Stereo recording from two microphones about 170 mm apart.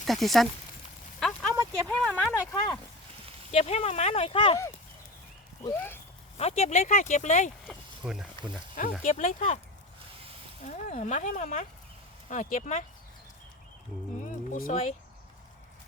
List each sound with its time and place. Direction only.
0.0 s speech: centre (ahead or behind)
1.2 s a sound: 5° left (ahead or behind)
1.9 s speech: 5° left (ahead or behind)
2.3 s speech: 20° left (ahead or behind)
3.5 s speech: 40° left (ahead or behind)
5.7 s speech: 10° left (ahead or behind)
6.3 s speech: 40° left (ahead or behind)
8.0 s speech: 5° right (ahead or behind)
8.7 s speech: 50° left (ahead or behind)
10.7 s speech: 50° left (ahead or behind)
14.2 s a sound: 50° left (ahead or behind)